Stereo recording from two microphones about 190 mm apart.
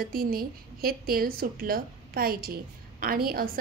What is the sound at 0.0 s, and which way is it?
A woman's voice, 50° right (ahead or behind).